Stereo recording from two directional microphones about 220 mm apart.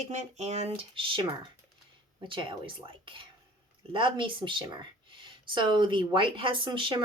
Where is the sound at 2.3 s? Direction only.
20° right (ahead or behind).